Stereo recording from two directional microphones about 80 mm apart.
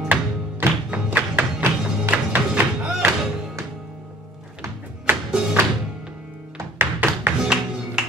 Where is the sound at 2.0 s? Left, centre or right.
Centre.